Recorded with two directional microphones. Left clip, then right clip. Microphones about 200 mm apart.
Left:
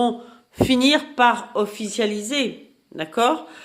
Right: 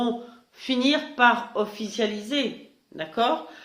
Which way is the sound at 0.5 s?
50° left (ahead or behind).